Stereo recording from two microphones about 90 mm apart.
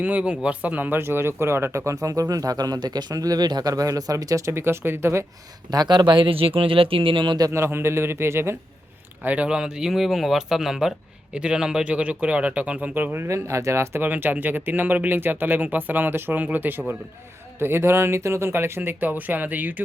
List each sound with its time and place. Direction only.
0.0 s speech: 15° right (ahead or behind)
5.7 s speech: 50° right (ahead or behind); by 7.3 s 70° right (ahead or behind)
7.5 s speech: 30° right (ahead or behind)
9.2 s speech: 15° right (ahead or behind)
13.2 s speech: 35° right (ahead or behind)